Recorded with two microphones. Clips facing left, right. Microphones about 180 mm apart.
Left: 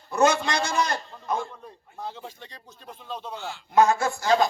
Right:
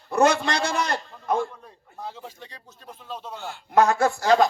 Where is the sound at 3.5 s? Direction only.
55° right (ahead or behind).